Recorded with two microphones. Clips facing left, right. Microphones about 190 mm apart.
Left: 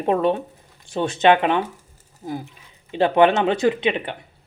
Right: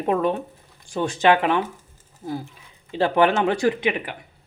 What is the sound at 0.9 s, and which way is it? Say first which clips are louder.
Speech: left 2 dB; 20° left (ahead or behind).